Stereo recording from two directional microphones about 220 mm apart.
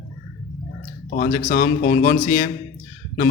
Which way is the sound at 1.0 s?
40° left (ahead or behind).